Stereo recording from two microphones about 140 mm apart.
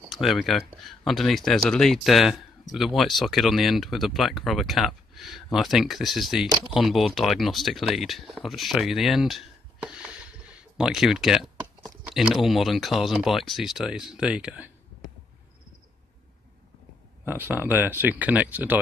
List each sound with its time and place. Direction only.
0.1 s speech: centre (ahead or behind)
17.3 s speech: 15° right (ahead or behind)